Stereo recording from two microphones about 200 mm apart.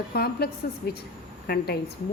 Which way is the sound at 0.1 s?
50° left (ahead or behind).